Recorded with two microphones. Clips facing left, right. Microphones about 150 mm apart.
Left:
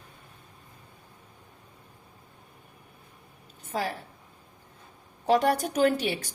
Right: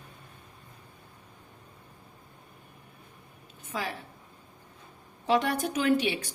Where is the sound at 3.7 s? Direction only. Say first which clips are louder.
Left 4 dB; 40° left (ahead or behind).